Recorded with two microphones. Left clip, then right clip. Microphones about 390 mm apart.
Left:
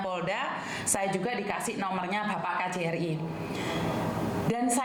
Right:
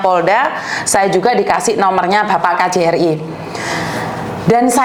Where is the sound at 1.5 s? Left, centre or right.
Right.